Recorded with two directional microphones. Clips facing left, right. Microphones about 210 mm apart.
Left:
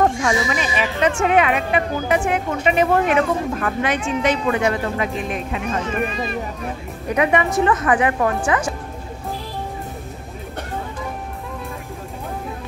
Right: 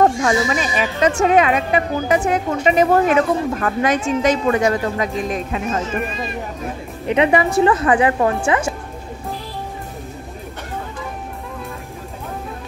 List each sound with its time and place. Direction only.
0.2 s a woman's voice: 40° right (ahead or behind)
7.1 s a woman's voice: 25° right (ahead or behind)